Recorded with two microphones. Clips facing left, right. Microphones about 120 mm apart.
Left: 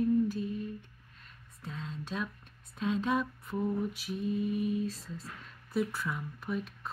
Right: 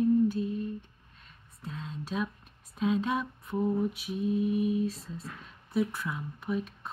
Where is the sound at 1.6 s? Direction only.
5° right (ahead or behind).